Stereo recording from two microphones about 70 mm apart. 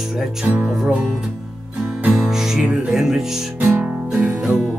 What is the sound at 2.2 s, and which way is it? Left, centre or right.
Music, centre.